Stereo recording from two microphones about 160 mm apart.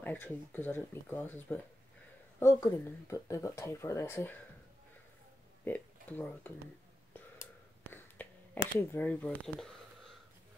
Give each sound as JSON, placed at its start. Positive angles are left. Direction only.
{"t": 0.0, "sound": "speech", "side_deg": 10}
{"t": 5.7, "sound": "speech", "side_deg": 10}
{"t": 7.8, "sound": "a sound", "side_deg": 10}
{"t": 8.7, "sound": "speech", "side_deg": 10}